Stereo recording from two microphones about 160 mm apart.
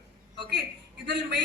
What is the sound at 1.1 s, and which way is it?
Speech, 90° right.